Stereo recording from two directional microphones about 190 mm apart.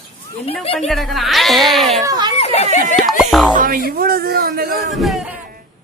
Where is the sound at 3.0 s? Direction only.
Centre (ahead or behind).